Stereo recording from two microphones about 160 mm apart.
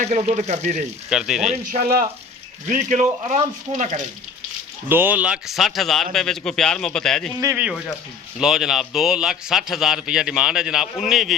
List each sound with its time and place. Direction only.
0.0 s speech: 45° right (ahead or behind)
1.1 s speech: 5° right (ahead or behind)
1.5 s speech: 60° right (ahead or behind)
2.6 s speech: 50° right (ahead or behind)
4.9 s speech: 10° right (ahead or behind)
7.5 s speech: 10° right (ahead or behind)